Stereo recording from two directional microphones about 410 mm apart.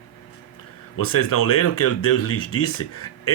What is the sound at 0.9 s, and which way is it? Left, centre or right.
Speech, left.